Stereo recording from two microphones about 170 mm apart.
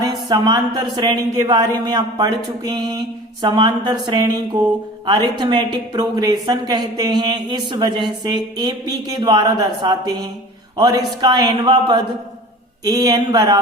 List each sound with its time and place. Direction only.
0.0 s speech: 25° right (ahead or behind)